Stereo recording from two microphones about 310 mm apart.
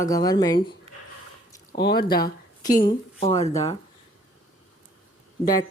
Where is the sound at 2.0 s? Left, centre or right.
Centre.